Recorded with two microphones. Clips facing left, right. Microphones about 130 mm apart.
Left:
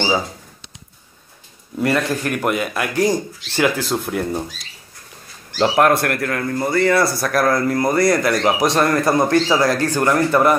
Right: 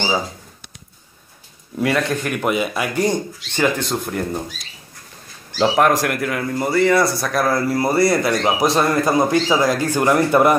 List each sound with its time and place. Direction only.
1.8 s a man's voice: centre (ahead or behind)
5.6 s a man's voice: centre (ahead or behind)
9.6 s speech: 15° right (ahead or behind)